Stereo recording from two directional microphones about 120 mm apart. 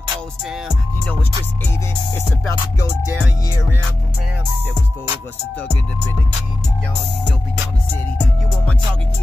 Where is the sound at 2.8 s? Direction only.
25° left (ahead or behind).